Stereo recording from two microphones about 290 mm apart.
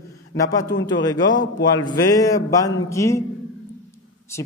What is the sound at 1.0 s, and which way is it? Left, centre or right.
Speech, centre.